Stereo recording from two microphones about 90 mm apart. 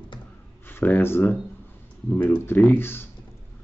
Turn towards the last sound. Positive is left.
turn(degrees=25)  # may be behind; listen again after turning